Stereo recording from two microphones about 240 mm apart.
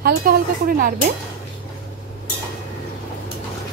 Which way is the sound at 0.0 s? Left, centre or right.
Right.